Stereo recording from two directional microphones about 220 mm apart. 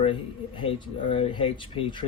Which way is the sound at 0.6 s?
25° left (ahead or behind).